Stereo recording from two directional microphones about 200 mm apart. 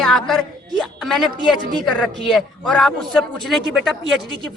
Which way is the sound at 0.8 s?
Centre (ahead or behind).